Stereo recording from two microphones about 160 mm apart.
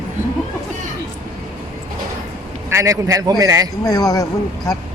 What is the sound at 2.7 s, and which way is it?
Speech, 20° right (ahead or behind).